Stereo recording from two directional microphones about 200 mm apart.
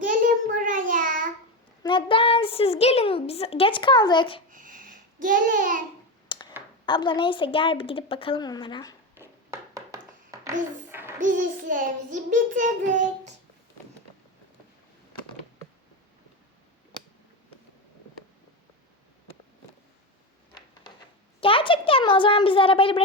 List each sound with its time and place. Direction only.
0.1 s child singing: 40° right (ahead or behind)
1.8 s speech: 25° left (ahead or behind)
4.5 s babbling: 45° right (ahead or behind)
6.2 s a sound: 25° left (ahead or behind)
6.8 s a woman's voice: 25° left (ahead or behind)
9.1 s a sound: 15° right (ahead or behind)
11.2 s a child's voice: 40° right (ahead or behind)
21.4 s a woman's voice: 25° left (ahead or behind)